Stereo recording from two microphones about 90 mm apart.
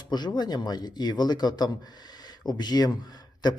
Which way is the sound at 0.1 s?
50° left (ahead or behind).